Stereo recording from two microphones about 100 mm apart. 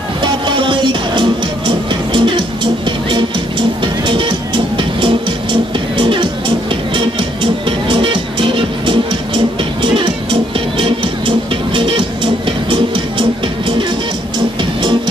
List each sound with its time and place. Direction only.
0.2 s music: 55° right (ahead or behind)
7.9 s music: 55° right (ahead or behind)
14.6 s music: 50° right (ahead or behind)